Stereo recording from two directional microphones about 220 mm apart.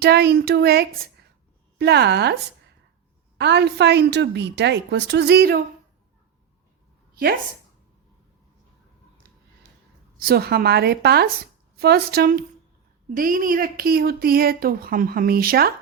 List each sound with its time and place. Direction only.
0.0 s a woman's voice: 45° right (ahead or behind)
7.1 s a sound: 45° right (ahead or behind)
10.2 s a woman's voice: 45° right (ahead or behind)